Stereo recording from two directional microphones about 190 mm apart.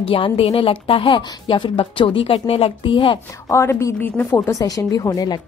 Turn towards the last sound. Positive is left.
turn(degrees=20)  # may be behind; listen again after turning